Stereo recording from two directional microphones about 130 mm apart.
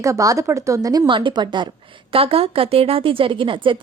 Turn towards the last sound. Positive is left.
turn(degrees=-40)  # may be behind; listen again after turning